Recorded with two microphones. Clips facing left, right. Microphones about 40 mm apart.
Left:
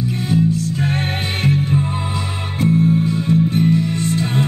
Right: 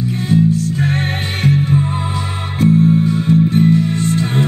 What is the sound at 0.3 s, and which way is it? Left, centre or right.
Music, right.